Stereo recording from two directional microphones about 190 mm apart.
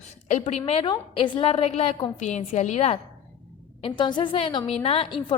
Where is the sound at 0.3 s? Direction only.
35° left (ahead or behind).